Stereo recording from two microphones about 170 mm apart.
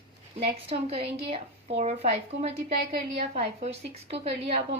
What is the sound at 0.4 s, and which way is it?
A woman's voice, 35° right (ahead or behind).